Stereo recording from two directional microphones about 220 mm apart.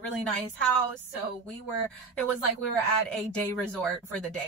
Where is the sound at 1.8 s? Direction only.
5° left (ahead or behind).